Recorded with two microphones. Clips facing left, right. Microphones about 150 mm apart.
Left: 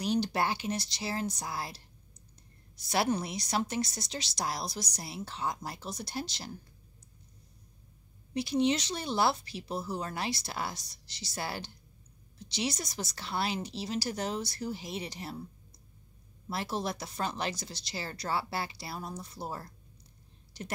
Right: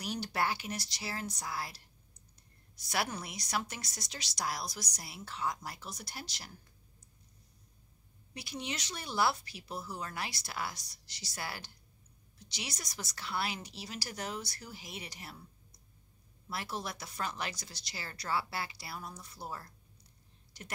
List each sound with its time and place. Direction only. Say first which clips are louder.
0.0 s speech: left 5 dB; 25° left (ahead or behind)
2.9 s speech: left 7 dB; 25° left (ahead or behind)
8.3 s speech: left 13 dB; 25° left (ahead or behind)
16.4 s speech: left 6 dB; 25° left (ahead or behind)